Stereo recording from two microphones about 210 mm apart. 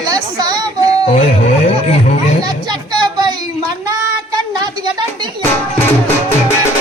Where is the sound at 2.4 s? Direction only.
20° right (ahead or behind).